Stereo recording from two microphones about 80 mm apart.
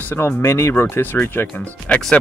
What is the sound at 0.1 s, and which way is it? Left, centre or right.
Speech, left.